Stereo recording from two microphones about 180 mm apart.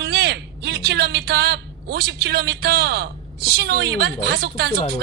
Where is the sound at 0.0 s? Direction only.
65° right (ahead or behind).